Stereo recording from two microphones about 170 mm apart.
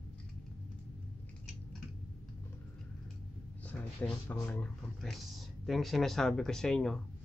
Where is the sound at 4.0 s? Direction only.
10° left (ahead or behind).